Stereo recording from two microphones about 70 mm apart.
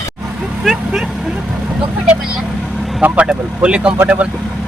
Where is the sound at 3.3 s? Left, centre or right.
Centre.